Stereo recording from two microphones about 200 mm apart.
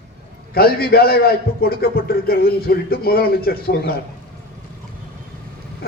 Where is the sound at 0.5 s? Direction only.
50° left (ahead or behind).